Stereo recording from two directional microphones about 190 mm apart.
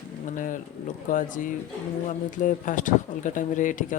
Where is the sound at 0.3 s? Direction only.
45° left (ahead or behind).